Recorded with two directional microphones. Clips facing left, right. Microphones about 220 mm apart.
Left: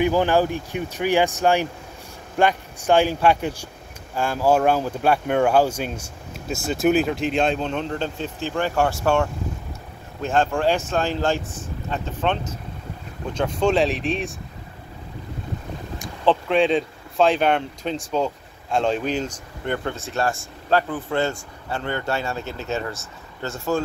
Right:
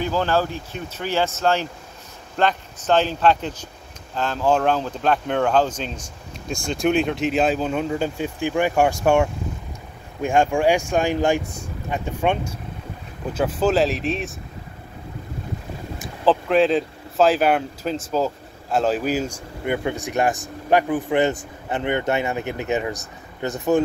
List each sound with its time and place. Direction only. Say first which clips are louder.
0.0 s speech: left 3 dB; 15° left (ahead or behind); by 14.3 s centre (ahead or behind)
16.0 s speech: right 1 dB; centre (ahead or behind); by 23.8 s 20° right (ahead or behind)